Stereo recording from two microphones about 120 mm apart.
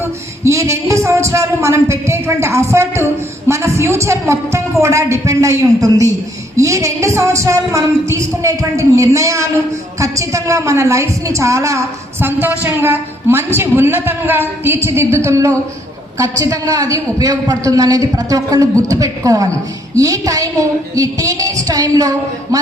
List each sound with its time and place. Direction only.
0.0 s a woman's voice: 25° right (ahead or behind)